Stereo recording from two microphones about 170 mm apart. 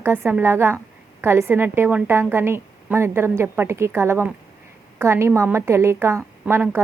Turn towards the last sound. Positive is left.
turn(degrees=-10)  # may be behind; listen again after turning